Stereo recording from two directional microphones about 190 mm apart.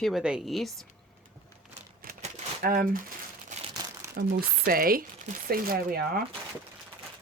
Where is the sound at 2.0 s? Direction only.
45° right (ahead or behind).